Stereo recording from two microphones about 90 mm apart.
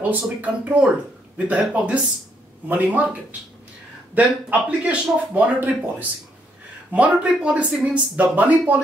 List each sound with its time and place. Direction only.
0.1 s speech: 15° right (ahead or behind)